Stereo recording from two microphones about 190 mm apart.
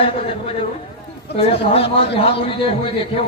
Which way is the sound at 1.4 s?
30° left (ahead or behind).